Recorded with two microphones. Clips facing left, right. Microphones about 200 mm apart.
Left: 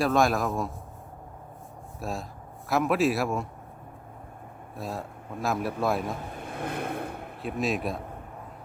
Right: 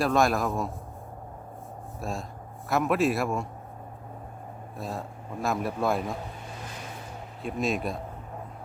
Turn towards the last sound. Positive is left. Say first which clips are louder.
# even
turn(degrees=0)  # may be behind; listen again after turning